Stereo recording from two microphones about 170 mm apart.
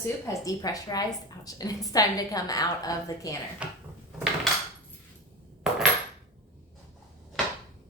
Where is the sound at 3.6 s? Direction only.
5° right (ahead or behind).